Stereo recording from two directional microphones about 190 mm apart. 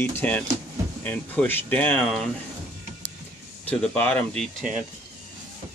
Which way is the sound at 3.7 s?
5° left (ahead or behind).